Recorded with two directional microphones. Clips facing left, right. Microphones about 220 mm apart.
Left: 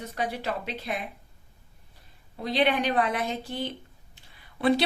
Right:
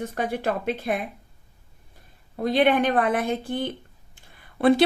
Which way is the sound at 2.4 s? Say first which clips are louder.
Right 5 dB; 50° right (ahead or behind).